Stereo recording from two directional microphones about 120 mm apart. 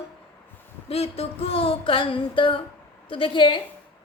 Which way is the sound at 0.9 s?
55° left (ahead or behind).